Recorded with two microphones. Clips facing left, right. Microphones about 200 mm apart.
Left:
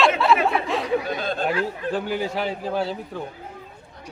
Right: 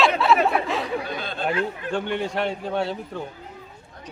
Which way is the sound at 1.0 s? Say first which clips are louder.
Left 4 dB; 45° left (ahead or behind).